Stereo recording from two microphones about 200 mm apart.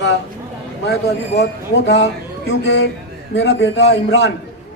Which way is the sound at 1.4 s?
60° left (ahead or behind).